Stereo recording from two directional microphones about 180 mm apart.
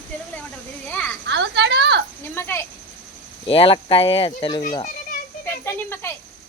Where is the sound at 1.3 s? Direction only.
70° right (ahead or behind).